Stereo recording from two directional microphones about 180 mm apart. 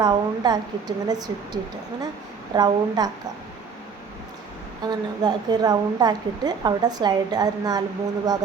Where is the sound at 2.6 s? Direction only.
20° right (ahead or behind).